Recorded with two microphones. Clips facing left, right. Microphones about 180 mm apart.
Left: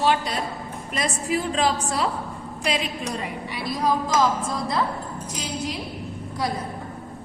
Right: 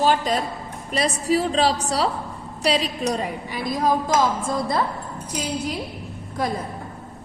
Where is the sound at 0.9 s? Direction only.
35° right (ahead or behind).